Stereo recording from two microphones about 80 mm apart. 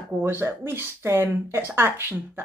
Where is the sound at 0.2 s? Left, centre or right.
Right.